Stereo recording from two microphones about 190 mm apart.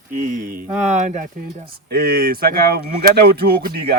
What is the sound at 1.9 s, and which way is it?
Speech, 55° right (ahead or behind).